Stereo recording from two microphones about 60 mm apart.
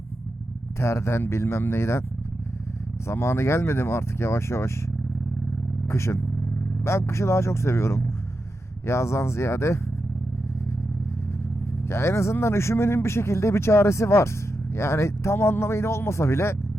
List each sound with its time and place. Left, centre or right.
0.8 s speech: left
3.1 s speech: left
5.9 s speech: left
11.9 s speech: left